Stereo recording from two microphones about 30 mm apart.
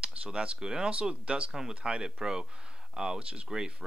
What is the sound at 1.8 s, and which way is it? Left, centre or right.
Speech, right.